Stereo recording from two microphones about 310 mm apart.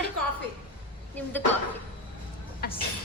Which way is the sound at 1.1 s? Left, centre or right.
Centre.